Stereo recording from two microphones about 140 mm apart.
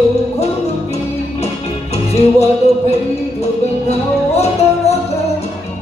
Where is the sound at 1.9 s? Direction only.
50° left (ahead or behind).